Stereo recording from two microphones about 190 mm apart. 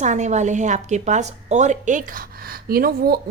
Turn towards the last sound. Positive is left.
turn(degrees=-50)  # may be behind; listen again after turning